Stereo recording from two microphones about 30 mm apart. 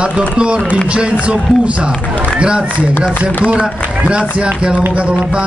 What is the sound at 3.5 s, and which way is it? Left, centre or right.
Speech, right.